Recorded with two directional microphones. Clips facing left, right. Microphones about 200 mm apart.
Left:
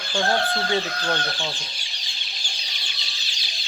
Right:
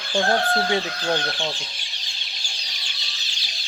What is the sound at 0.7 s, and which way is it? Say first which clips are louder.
Speech: right 1 dB; 20° right (ahead or behind).